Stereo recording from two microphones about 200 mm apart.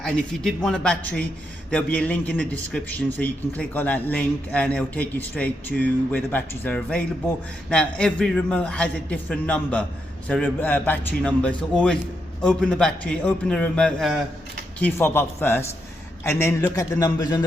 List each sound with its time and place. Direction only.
0.0 s a man's voice: 5° left (ahead or behind); by 17.4 s 20° left (ahead or behind)